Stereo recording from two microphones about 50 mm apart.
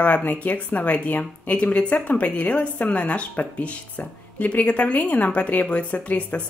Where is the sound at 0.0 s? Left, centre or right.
Left.